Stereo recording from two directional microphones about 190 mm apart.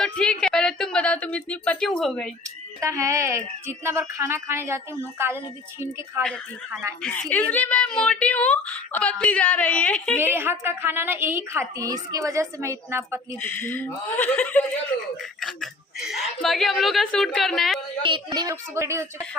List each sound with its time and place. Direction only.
0.0 s speech: 5° left (ahead or behind)
2.8 s a woman's voice: 15° right (ahead or behind)
7.0 s a woman's voice: 5° left (ahead or behind)
10.2 s a woman's voice: 10° right (ahead or behind)
13.4 s a woman's voice: 10° left (ahead or behind)
18.0 s a woman's voice: 25° right (ahead or behind)